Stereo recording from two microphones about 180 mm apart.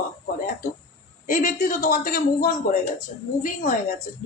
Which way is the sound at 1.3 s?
45° left (ahead or behind).